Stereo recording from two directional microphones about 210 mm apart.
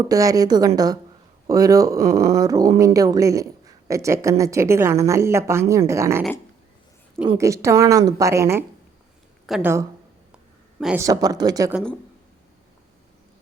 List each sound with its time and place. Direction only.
0.0 s speech: 15° right (ahead or behind)
7.3 s speech: 15° right (ahead or behind)
11.0 s speech: 15° right (ahead or behind)